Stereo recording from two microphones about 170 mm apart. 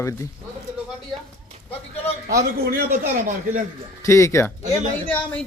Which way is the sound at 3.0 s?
50° right (ahead or behind).